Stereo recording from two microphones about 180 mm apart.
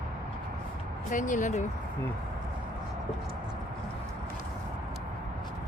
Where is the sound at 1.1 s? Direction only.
45° left (ahead or behind).